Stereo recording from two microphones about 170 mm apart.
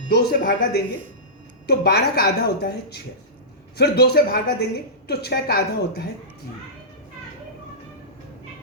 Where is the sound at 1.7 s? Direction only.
70° left (ahead or behind).